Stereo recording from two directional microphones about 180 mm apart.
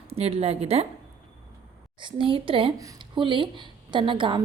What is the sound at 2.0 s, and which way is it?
A woman's voice, 25° right (ahead or behind).